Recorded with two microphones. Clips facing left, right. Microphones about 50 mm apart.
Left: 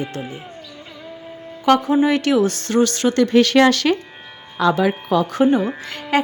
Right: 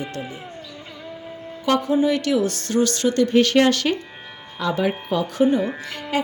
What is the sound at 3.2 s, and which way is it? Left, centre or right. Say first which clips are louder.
Speech: left 3 dB; left.